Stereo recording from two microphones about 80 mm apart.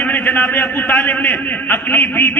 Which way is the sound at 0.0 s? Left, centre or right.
Left.